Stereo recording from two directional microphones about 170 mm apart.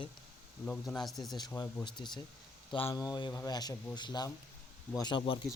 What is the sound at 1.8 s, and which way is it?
Speech, 25° left (ahead or behind).